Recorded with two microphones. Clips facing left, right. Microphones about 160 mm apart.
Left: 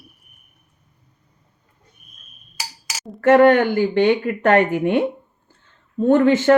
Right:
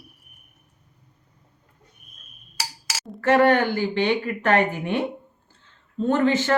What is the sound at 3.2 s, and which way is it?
Speech, 50° left (ahead or behind).